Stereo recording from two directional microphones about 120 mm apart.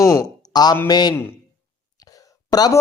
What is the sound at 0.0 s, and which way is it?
A man's voice, 25° left (ahead or behind).